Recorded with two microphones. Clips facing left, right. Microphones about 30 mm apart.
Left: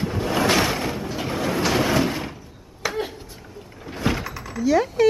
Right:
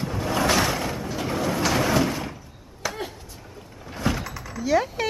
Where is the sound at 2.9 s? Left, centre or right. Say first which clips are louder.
Left 4 dB; centre.